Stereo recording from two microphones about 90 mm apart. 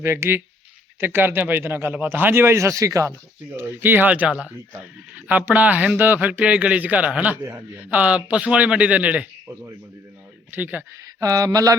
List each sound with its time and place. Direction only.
0.0 s a man's voice: 30° right (ahead or behind)
3.6 s a man's voice: 25° right (ahead or behind)
10.5 s a man's voice: 20° right (ahead or behind)
11.0 s mantra: 40° right (ahead or behind)